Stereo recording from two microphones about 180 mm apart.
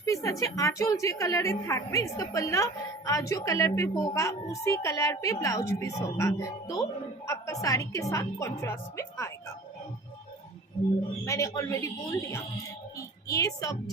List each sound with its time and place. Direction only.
0.0 s a woman's voice: 15° left (ahead or behind)
11.3 s a woman's voice: 15° left (ahead or behind)